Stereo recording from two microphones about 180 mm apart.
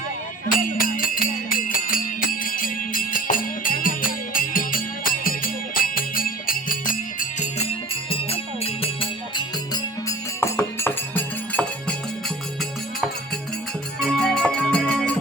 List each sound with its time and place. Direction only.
0.4 s music: 50° left (ahead or behind)
8.1 s music: 30° left (ahead or behind); by 11.9 s 10° left (ahead or behind)
14.0 s music: 5° left (ahead or behind)